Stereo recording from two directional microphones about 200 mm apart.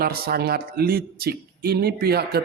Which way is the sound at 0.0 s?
50° right (ahead or behind).